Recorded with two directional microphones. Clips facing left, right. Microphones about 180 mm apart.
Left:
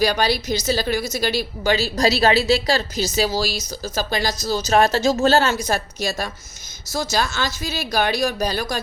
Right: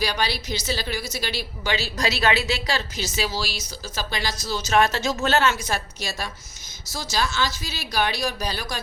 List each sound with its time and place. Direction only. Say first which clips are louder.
0.0 s a woman's voice: left 7 dB; 45° left (ahead or behind)